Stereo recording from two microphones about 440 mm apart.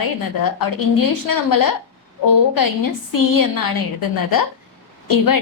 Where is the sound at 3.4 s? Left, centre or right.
Left.